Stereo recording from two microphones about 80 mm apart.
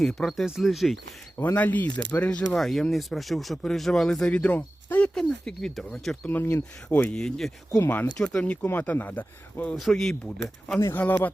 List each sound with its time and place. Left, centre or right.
0.0 s speech: centre
1.4 s speech: left
2.6 s speech: centre; by 5.0 s left
5.0 s speech: centre
6.2 s speech: left
6.8 s speech: centre
9.7 s speech: centre
10.9 s speech: left